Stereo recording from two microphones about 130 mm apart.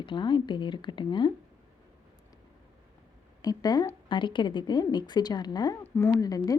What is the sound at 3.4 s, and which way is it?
A woman's voice, 30° left (ahead or behind).